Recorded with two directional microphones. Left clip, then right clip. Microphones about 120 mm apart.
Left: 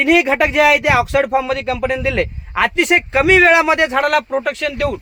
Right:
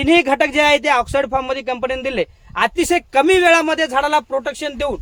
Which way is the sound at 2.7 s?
75° right (ahead or behind).